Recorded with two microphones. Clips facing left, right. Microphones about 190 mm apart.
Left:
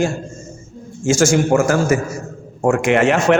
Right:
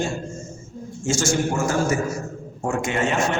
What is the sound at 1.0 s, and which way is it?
A man's voice, 90° left.